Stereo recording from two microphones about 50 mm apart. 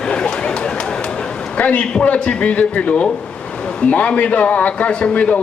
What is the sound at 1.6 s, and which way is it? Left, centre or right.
Speech, left.